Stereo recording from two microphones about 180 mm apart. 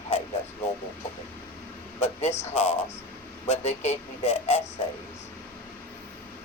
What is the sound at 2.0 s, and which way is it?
Speech, 35° left (ahead or behind).